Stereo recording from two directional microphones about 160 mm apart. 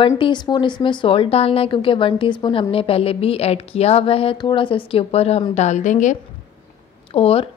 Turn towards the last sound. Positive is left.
turn(degrees=35)  # may be behind; listen again after turning